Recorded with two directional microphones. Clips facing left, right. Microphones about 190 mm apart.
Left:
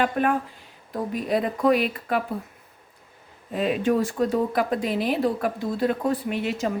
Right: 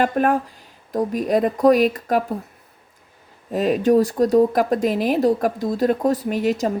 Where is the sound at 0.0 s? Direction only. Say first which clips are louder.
Right 4 dB; 45° right (ahead or behind).